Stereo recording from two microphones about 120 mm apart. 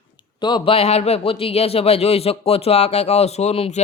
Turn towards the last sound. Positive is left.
turn(degrees=60)  # may be behind; listen again after turning